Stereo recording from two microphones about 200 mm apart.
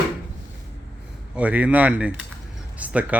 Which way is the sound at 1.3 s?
5° right (ahead or behind).